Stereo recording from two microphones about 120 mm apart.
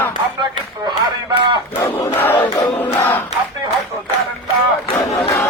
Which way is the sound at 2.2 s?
15° left (ahead or behind).